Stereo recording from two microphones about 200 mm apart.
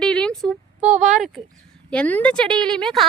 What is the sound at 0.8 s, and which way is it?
Speech, 40° right (ahead or behind).